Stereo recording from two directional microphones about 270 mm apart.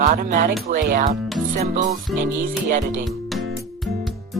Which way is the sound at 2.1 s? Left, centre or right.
Centre.